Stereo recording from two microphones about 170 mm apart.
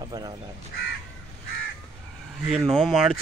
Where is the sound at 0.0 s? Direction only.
25° right (ahead or behind).